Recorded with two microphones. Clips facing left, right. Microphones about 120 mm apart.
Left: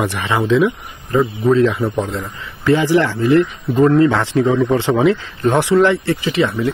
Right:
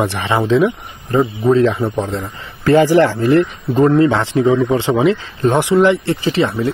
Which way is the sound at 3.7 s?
30° right (ahead or behind).